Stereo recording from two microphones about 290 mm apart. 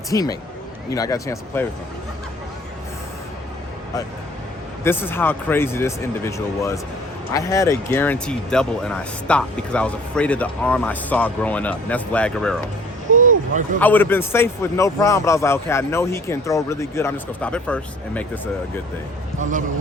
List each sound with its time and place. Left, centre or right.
0.1 s a man's voice: centre
4.8 s a man's voice: centre
13.1 s a sound: right
13.7 s a man's voice: centre
19.4 s a man's voice: right